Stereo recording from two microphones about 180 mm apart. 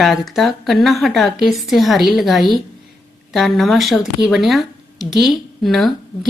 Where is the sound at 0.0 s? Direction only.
Centre (ahead or behind).